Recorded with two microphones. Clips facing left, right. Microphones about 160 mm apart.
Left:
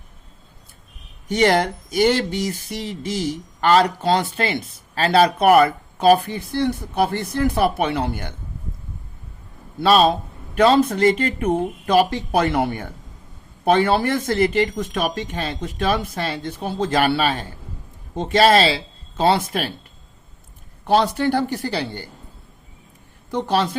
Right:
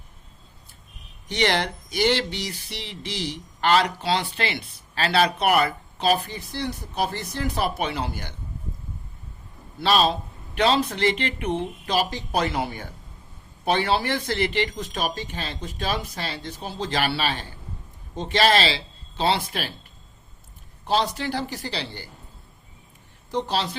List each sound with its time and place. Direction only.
1.3 s speech: 45° left (ahead or behind)
9.8 s speech: 50° left (ahead or behind)
20.8 s speech: 55° left (ahead or behind)
23.3 s speech: 55° left (ahead or behind)